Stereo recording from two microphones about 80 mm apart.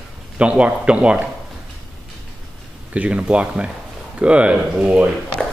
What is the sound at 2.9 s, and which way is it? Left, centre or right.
Speech, centre.